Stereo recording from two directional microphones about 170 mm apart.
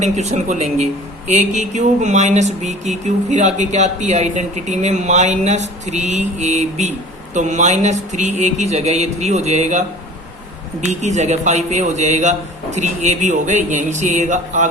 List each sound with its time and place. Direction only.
0.0 s a man's voice: 45° right (ahead or behind)